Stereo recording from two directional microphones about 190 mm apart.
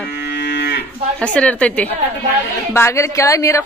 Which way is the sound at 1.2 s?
5° left (ahead or behind).